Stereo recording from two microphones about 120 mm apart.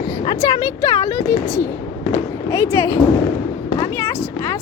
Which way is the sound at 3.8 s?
25° left (ahead or behind).